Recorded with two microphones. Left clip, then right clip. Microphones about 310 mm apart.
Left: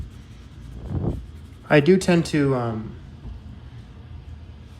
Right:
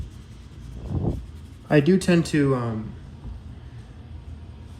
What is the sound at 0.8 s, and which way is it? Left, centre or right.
Vehicle, centre.